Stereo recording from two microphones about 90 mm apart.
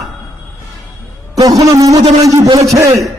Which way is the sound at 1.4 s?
45° right (ahead or behind).